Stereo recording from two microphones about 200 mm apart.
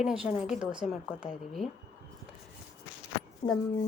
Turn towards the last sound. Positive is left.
turn(degrees=30)  # may be behind; listen again after turning